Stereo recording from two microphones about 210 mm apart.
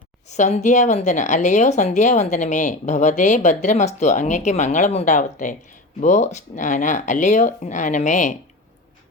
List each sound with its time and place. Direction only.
0.3 s a woman's voice: 35° left (ahead or behind)